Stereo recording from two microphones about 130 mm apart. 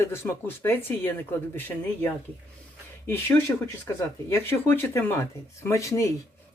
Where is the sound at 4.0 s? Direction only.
20° left (ahead or behind).